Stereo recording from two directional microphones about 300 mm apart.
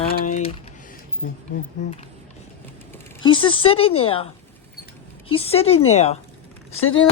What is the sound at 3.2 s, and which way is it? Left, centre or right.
Speech, centre.